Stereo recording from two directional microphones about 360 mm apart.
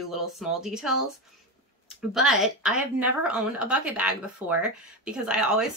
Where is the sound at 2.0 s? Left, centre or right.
Centre.